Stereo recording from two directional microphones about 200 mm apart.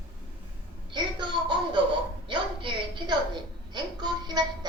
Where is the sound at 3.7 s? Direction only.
20° right (ahead or behind).